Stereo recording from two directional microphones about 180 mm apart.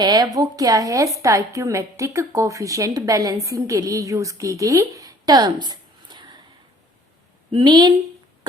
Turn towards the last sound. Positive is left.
turn(degrees=-25)  # may be behind; listen again after turning